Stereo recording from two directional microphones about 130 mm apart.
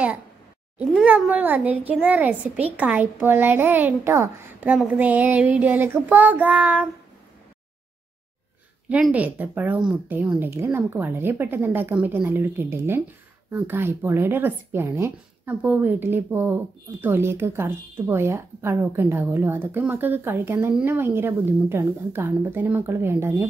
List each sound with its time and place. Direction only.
1.0 s speech: 10° right (ahead or behind)
8.8 s speech: 10° right (ahead or behind)